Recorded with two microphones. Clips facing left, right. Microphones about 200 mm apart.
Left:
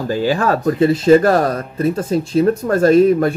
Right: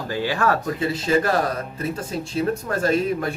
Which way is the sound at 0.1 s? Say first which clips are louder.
Left 5 dB; 30° left (ahead or behind).